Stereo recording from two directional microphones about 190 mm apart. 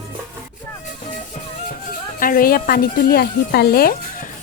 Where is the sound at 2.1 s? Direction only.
45° left (ahead or behind).